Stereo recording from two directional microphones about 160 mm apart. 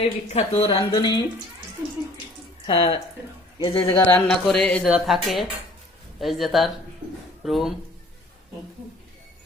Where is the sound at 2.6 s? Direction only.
30° left (ahead or behind).